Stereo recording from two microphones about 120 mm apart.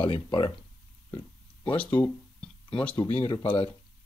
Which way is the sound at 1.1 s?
45° left (ahead or behind).